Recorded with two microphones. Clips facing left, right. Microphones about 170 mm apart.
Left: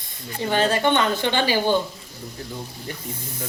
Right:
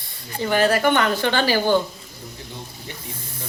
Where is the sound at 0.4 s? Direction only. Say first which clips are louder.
Right 2 dB; 25° left (ahead or behind).